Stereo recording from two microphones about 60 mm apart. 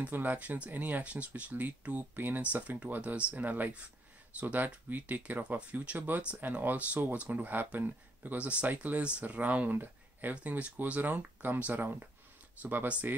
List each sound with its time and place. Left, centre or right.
0.0 s speech: right